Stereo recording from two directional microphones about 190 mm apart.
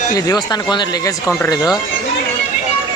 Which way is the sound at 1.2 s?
5° left (ahead or behind).